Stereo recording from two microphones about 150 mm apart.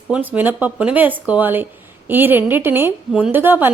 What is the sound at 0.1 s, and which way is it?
A woman's voice, 10° right (ahead or behind).